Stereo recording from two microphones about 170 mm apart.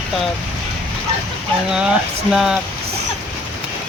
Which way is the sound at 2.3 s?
5° right (ahead or behind).